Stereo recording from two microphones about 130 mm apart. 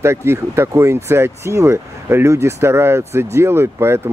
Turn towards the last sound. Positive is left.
turn(degrees=-20)  # may be behind; listen again after turning